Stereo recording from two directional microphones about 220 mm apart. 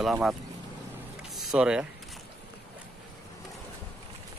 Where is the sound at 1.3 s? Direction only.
5° right (ahead or behind).